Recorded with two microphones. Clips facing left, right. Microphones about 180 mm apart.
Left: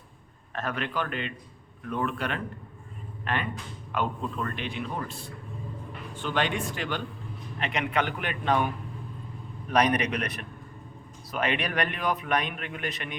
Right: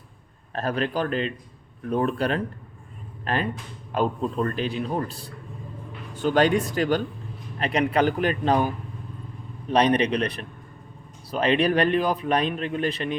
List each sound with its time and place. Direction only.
0.5 s a man's voice: 35° right (ahead or behind)